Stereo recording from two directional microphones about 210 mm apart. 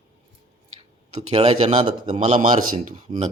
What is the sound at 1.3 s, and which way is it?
Speech, 30° right (ahead or behind).